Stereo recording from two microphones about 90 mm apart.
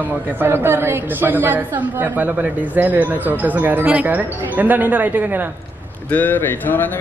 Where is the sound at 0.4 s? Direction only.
25° right (ahead or behind).